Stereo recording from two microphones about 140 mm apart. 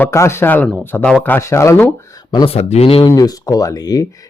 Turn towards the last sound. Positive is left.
turn(degrees=25)  # may be behind; listen again after turning